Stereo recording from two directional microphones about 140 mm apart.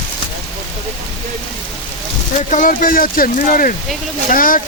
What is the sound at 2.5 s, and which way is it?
Speech, 70° left (ahead or behind).